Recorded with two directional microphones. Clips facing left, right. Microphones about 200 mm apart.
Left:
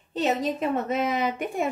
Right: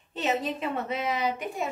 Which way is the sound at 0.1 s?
40° left (ahead or behind).